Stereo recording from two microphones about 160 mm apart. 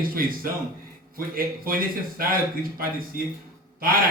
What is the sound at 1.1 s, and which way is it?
A man's voice, 65° right (ahead or behind).